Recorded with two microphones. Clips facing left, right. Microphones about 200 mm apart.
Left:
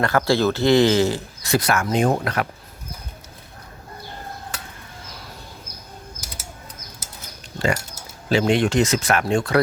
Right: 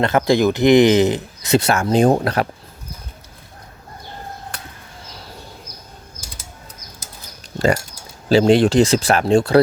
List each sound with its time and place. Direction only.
0.0 s speech: 20° right (ahead or behind)
8.3 s speech: 35° right (ahead or behind)